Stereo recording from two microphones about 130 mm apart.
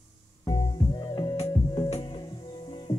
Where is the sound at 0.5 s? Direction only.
35° left (ahead or behind).